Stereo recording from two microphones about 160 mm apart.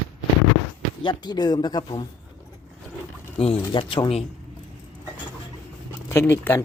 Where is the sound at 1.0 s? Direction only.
30° left (ahead or behind).